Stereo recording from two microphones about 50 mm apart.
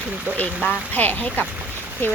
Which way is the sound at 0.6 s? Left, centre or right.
Left.